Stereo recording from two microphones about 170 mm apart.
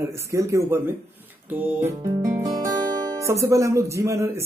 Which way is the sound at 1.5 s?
15° right (ahead or behind).